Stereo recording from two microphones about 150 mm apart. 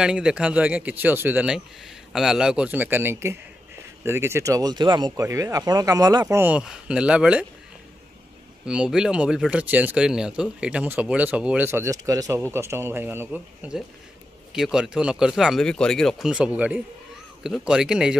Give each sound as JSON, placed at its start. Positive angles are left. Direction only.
{"t": 0.0, "sound": "speech", "side_deg": -5}
{"t": 8.6, "sound": "speech", "side_deg": -5}